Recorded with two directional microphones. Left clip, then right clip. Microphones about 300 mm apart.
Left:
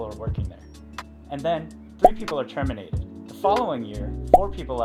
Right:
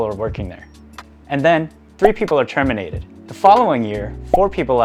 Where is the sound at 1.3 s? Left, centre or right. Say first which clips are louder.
Right 11 dB; right.